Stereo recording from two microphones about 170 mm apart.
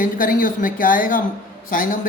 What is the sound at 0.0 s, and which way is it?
A woman's voice, 55° left (ahead or behind).